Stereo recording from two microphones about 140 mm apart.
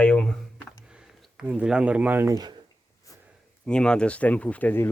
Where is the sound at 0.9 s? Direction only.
10° right (ahead or behind); by 2.6 s 25° right (ahead or behind).